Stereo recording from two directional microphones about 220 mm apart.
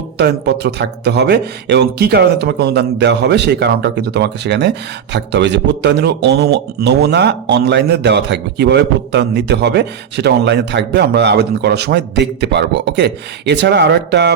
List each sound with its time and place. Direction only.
0.2 s speech: 50° right (ahead or behind)